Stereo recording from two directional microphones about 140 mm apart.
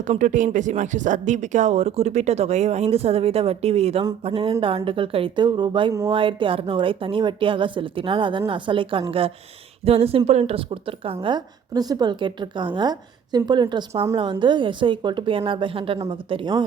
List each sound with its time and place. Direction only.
0.0 s a woman's voice: 65° right (ahead or behind); by 16.6 s 35° right (ahead or behind)